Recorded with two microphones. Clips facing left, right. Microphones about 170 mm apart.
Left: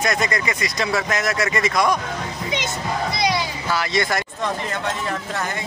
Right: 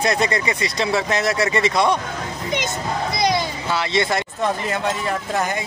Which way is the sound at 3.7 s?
25° right (ahead or behind).